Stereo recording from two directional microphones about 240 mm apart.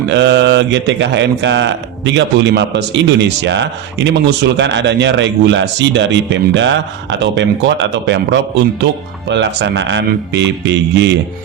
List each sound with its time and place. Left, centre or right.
0.1 s speech: right